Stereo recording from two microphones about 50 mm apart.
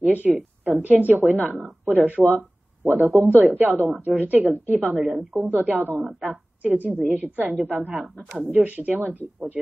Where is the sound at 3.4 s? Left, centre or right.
Right.